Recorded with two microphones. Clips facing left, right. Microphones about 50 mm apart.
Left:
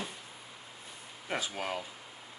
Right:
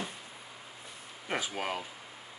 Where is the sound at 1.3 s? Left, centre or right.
Centre.